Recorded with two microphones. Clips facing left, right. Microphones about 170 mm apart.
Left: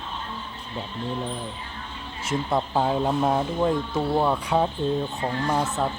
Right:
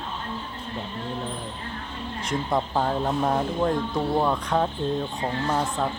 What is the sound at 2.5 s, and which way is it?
A woman's voice, 5° left (ahead or behind).